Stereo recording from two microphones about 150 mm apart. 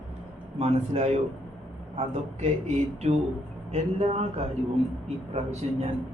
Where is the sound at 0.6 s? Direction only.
45° right (ahead or behind).